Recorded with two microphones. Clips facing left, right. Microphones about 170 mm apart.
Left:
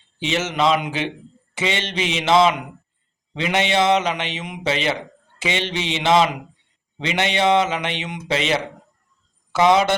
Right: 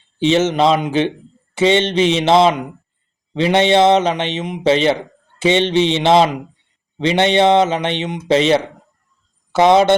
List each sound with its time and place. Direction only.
0.3 s a man's voice: 30° right (ahead or behind)